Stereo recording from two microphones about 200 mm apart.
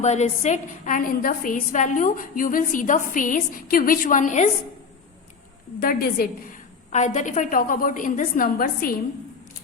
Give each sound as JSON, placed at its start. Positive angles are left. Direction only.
{"t": 0.0, "sound": "a woman's voice", "side_deg": 35}
{"t": 5.8, "sound": "a woman's voice", "side_deg": 45}